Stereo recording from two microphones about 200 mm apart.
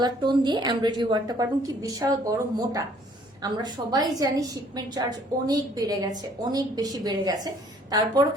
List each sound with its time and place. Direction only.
0.0 s a woman's voice: 20° right (ahead or behind)